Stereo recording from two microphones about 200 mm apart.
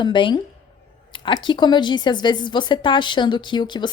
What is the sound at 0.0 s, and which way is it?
A woman's voice, 25° left (ahead or behind).